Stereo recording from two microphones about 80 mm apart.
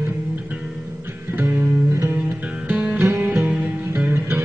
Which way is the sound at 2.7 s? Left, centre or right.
Centre.